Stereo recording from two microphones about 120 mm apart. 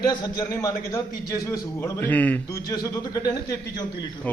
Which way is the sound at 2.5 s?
30° left (ahead or behind).